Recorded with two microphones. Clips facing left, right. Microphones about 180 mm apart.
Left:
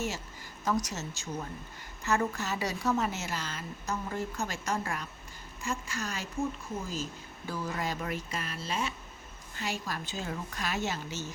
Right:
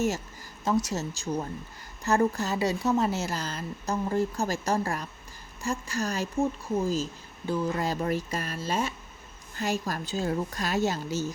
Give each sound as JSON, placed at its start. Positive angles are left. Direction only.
{"t": 0.6, "sound": "speech", "side_deg": -25}
{"t": 7.4, "sound": "speech", "side_deg": -20}
{"t": 7.8, "sound": "speech", "side_deg": -35}